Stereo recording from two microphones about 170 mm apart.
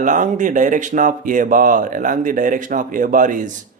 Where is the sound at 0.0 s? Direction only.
50° right (ahead or behind).